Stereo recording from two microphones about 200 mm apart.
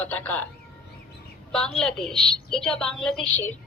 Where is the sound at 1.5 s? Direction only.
5° left (ahead or behind).